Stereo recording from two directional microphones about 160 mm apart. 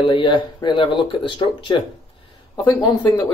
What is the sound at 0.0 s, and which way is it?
Speech, 30° left (ahead or behind).